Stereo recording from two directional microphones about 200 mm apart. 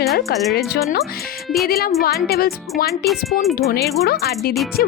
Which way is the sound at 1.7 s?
50° left (ahead or behind).